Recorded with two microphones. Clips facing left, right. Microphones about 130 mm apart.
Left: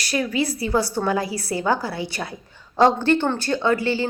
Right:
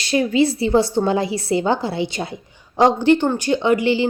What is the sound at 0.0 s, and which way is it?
A woman's voice, 25° right (ahead or behind).